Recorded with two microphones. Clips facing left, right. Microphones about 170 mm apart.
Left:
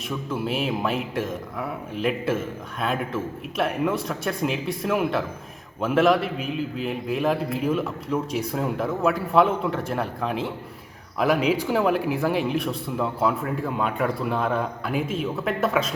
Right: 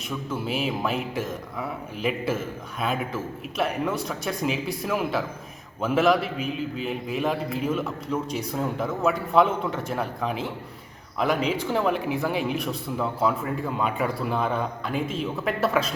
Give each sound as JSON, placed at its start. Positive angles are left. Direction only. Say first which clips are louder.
{"t": 0.3, "sound": "a man's voice", "louder": "left 2 dB", "side_deg": 0}